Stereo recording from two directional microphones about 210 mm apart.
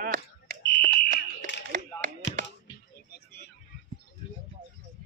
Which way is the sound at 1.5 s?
60° left (ahead or behind).